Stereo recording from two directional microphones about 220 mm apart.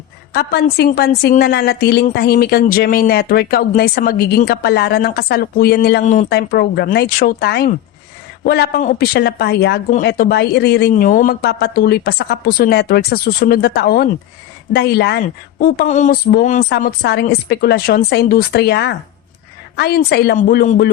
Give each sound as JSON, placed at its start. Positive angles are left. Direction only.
{"t": 0.3, "sound": "a woman's voice", "side_deg": 45}
{"t": 15.6, "sound": "a woman's voice", "side_deg": 35}